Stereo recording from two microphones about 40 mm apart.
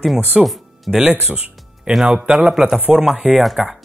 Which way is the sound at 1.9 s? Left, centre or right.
Right.